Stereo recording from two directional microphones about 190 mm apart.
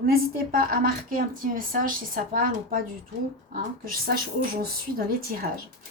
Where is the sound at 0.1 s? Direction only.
50° right (ahead or behind).